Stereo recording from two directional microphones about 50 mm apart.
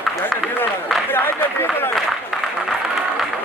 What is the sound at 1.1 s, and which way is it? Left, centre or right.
Run, left.